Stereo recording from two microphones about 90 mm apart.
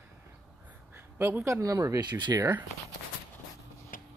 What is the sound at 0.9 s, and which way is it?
Speech, 25° right (ahead or behind).